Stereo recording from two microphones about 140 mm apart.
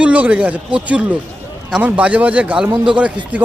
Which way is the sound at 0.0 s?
10° right (ahead or behind).